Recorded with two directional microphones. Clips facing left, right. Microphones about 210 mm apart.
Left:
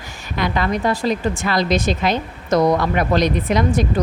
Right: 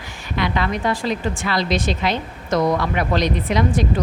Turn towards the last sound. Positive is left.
turn(degrees=45)  # may be behind; listen again after turning